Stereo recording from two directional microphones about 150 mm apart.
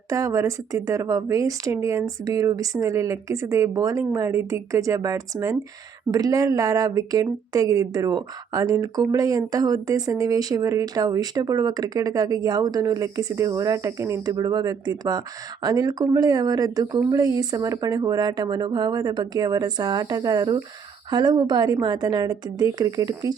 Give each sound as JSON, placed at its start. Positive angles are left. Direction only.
{"t": 0.1, "sound": "speech", "side_deg": -20}